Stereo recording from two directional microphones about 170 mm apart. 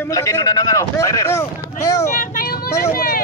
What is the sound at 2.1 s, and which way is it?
Vehicle, 55° left (ahead or behind).